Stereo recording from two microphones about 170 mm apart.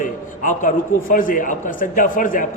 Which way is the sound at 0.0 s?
50° left (ahead or behind).